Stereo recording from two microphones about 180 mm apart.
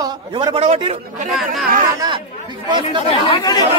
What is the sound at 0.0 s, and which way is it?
Speech, 25° right (ahead or behind).